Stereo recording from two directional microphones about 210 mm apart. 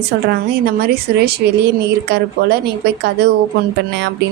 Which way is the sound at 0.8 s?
50° right (ahead or behind).